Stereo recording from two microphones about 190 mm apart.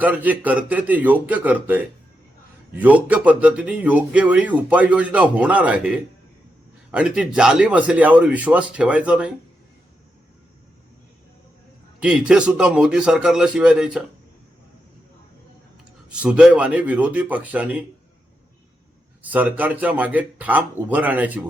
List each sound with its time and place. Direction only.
0.0 s speech: 10° right (ahead or behind)
11.9 s speech: 5° right (ahead or behind)
16.1 s speech: 5° right (ahead or behind)
19.2 s speech: 10° right (ahead or behind)